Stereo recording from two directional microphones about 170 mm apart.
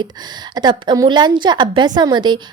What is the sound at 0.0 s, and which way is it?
A woman's voice, 25° right (ahead or behind).